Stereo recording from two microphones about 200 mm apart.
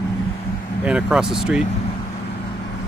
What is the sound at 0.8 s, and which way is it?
Speech, 5° right (ahead or behind).